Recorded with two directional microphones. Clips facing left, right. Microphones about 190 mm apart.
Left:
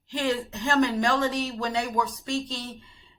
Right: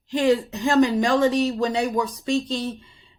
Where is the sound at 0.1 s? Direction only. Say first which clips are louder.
Right 8 dB; 15° right (ahead or behind).